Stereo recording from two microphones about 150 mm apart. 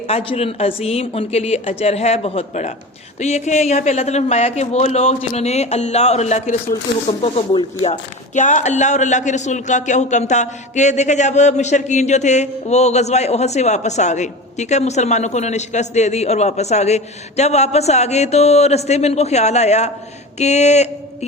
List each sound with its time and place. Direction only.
0.1 s speech: 40° left (ahead or behind)
7.2 s speech: 35° left (ahead or behind)
8.4 s speech: 55° left (ahead or behind)